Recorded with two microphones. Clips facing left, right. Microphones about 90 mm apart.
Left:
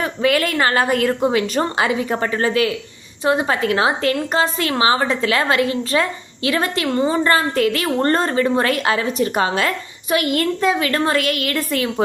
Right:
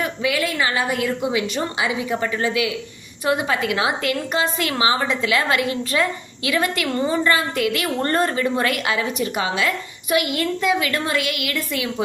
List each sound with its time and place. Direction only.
0.0 s a woman's voice: 45° left (ahead or behind); by 7.2 s 30° left (ahead or behind)
7.3 s a woman's voice: 40° left (ahead or behind)